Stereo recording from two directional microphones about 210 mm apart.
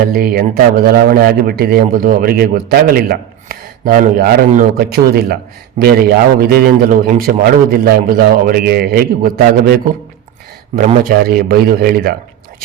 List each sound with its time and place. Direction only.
0.0 s a man's voice: 45° right (ahead or behind)